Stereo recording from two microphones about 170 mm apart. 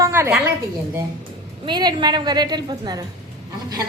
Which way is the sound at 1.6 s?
25° right (ahead or behind).